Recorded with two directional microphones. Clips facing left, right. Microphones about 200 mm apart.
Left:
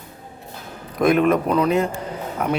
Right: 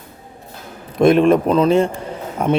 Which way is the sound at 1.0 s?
30° right (ahead or behind).